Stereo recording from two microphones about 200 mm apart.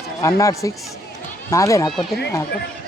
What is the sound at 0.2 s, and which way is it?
Speech, 15° left (ahead or behind).